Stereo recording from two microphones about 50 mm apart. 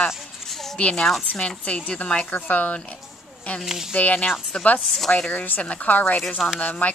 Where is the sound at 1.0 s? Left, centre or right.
Centre.